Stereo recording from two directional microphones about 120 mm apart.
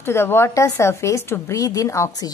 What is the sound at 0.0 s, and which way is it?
A woman's voice, 20° left (ahead or behind).